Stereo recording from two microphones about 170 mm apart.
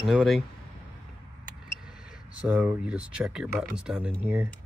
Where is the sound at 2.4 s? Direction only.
10° right (ahead or behind).